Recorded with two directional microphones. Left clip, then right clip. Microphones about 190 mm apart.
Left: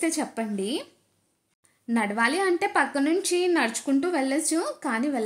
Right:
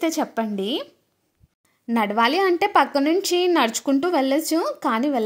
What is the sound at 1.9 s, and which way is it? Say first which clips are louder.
A woman's voice: right 5 dB; 35° right (ahead or behind).